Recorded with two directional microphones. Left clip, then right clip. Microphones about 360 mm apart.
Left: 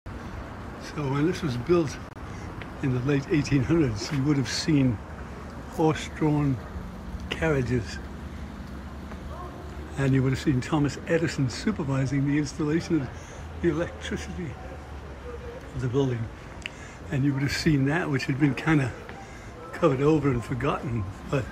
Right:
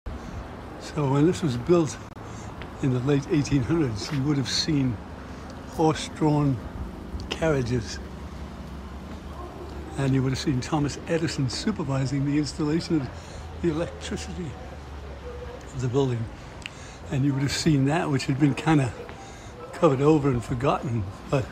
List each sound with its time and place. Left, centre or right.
0.9 s speech: centre
9.9 s speech: centre
15.8 s speech: centre